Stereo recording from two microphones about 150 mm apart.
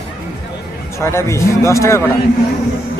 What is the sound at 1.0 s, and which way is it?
Speech, 20° left (ahead or behind).